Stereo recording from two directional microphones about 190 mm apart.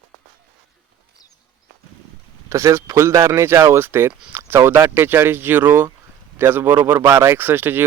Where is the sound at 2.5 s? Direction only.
15° right (ahead or behind).